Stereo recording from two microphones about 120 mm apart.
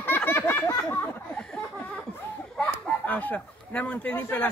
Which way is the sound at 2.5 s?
15° left (ahead or behind).